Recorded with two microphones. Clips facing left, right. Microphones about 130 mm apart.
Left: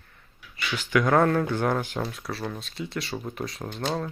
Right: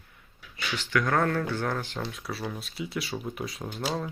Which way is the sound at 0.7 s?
15° left (ahead or behind).